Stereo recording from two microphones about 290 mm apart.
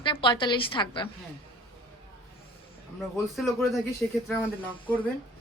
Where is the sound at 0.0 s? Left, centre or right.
Centre.